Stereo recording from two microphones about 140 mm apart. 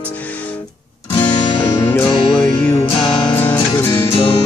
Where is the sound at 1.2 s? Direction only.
30° left (ahead or behind).